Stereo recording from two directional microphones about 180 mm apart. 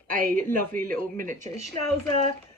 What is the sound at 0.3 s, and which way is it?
Speech, 10° left (ahead or behind).